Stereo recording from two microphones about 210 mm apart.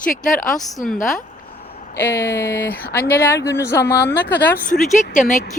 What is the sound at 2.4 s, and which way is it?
Speech, 45° left (ahead or behind).